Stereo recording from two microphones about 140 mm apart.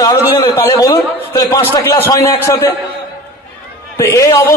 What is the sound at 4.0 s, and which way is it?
Speech, 20° left (ahead or behind).